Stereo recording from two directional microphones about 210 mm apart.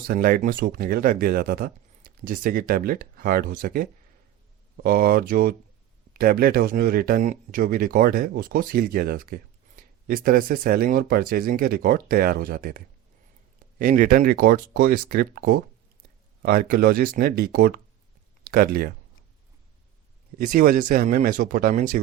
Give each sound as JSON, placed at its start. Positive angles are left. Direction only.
{"t": 0.1, "sound": "speech", "side_deg": -45}
{"t": 20.5, "sound": "speech", "side_deg": -40}